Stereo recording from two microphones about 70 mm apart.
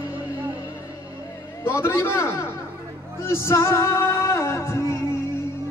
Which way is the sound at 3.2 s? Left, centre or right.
Left.